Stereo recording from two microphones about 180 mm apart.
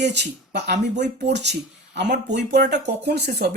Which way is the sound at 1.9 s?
70° right (ahead or behind).